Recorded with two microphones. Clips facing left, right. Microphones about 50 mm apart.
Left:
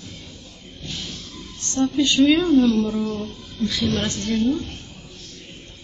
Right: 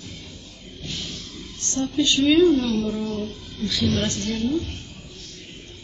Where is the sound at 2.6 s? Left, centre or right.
Left.